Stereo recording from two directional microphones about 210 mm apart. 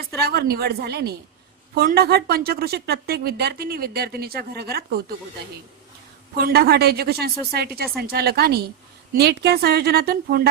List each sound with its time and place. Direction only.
0.2 s a woman's voice: 50° right (ahead or behind)
6.3 s a woman's voice: 50° right (ahead or behind)